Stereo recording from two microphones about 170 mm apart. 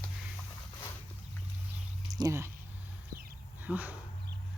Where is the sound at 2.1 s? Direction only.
20° right (ahead or behind).